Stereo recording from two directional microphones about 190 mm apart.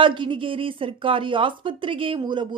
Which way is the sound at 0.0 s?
25° right (ahead or behind).